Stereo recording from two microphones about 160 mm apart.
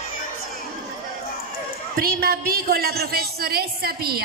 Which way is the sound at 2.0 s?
70° right (ahead or behind).